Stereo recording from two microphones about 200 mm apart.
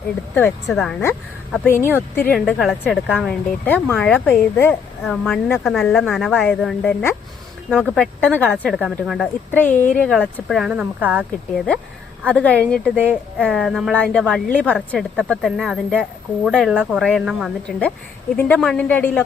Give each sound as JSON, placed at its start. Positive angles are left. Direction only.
{"t": 0.3, "sound": "a woman's voice", "side_deg": 5}
{"t": 9.7, "sound": "speech", "side_deg": 40}
{"t": 10.0, "sound": "a woman's voice", "side_deg": 0}
{"t": 13.0, "sound": "a woman's voice", "side_deg": -5}